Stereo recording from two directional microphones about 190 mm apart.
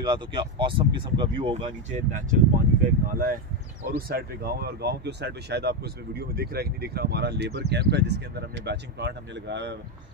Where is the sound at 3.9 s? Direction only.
55° right (ahead or behind).